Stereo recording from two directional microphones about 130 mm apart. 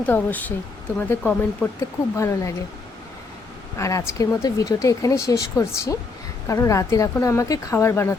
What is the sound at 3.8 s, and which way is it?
Speech, 25° left (ahead or behind).